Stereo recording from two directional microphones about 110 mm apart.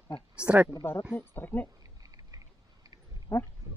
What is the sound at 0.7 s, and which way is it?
Speech, 25° left (ahead or behind).